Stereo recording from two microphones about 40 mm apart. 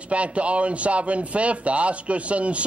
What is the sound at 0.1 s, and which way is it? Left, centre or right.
Speech, right.